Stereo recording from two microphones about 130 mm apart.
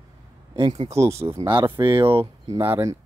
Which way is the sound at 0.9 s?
20° right (ahead or behind).